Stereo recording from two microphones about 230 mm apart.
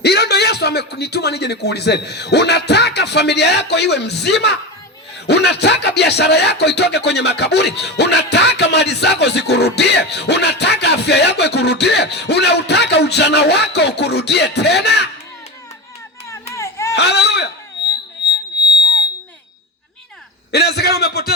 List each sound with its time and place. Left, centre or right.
0.0 s music: left
16.3 s baby cry: centre
16.9 s a sound: left
20.5 s music: left